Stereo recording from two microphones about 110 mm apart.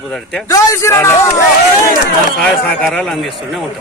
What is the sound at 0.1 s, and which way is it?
Speech, 5° left (ahead or behind).